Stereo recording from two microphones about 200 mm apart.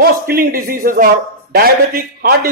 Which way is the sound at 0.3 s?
45° right (ahead or behind).